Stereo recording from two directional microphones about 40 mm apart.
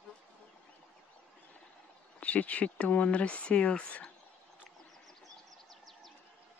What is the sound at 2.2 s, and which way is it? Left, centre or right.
Speech, left.